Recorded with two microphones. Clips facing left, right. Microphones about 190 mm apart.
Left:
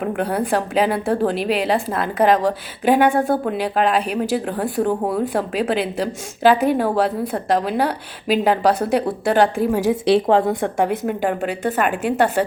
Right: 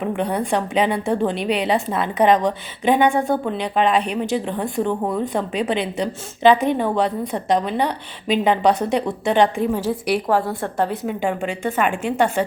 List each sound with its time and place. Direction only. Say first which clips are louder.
0.0 s a woman's voice: left 1 dB; 5° left (ahead or behind)
10.1 s speech: left 5 dB; 25° left (ahead or behind)
11.0 s a woman's voice: left 2 dB; centre (ahead or behind)